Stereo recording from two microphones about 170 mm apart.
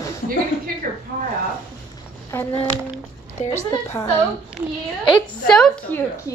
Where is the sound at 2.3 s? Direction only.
15° left (ahead or behind).